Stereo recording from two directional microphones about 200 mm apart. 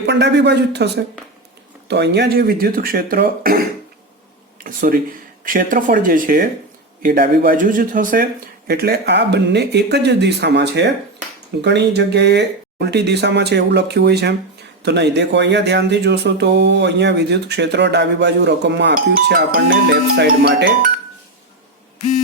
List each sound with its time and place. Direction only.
0.0 s speech: 60° right (ahead or behind)
1.9 s speech: 55° right (ahead or behind)